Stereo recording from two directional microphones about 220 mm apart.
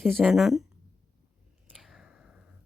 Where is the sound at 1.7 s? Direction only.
Centre (ahead or behind).